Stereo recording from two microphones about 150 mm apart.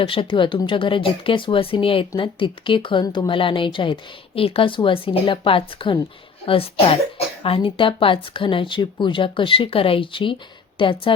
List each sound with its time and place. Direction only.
0.0 s speech: 35° left (ahead or behind)